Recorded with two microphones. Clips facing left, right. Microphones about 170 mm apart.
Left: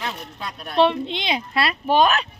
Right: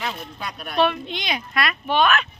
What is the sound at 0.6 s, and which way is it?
Speech, 25° left (ahead or behind).